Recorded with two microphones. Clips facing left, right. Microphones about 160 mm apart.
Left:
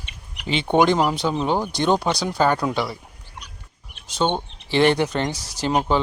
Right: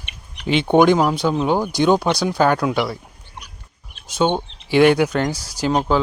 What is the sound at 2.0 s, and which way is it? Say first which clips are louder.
Speech: right 4 dB; 15° left (ahead or behind).